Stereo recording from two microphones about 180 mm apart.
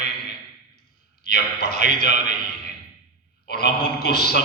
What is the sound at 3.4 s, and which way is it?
Speech, 65° left (ahead or behind).